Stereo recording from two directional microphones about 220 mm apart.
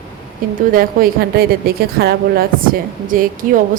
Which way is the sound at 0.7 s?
40° right (ahead or behind).